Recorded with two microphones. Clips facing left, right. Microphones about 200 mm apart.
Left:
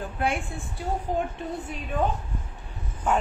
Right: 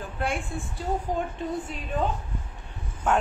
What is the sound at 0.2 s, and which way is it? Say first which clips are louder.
Speech: left 2 dB; 60° left (ahead or behind).